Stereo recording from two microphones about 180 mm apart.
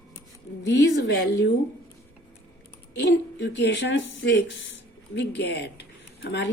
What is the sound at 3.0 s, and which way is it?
Speech, 75° left (ahead or behind).